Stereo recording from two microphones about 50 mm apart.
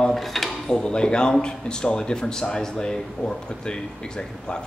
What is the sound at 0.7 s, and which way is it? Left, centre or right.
Speech, centre.